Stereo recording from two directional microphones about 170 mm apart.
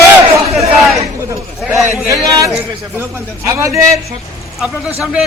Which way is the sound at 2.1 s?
20° right (ahead or behind).